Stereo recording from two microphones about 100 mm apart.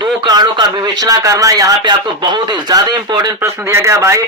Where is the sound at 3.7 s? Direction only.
30° right (ahead or behind).